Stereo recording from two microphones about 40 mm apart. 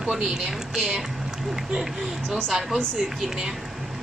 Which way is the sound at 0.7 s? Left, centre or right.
Right.